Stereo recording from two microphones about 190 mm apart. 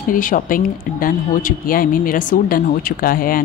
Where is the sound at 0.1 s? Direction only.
45° left (ahead or behind).